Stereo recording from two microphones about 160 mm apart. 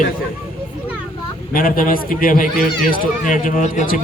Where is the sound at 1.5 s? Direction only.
60° left (ahead or behind).